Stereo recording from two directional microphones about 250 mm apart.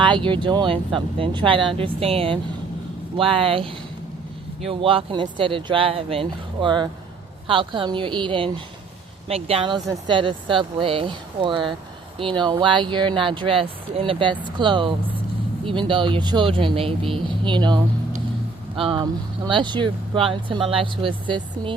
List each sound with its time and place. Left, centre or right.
0.0 s speech: centre